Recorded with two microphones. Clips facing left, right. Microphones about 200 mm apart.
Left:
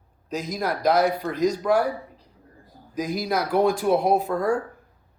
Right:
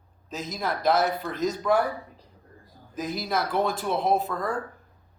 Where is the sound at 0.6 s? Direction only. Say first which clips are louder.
Left 2 dB; 40° left (ahead or behind).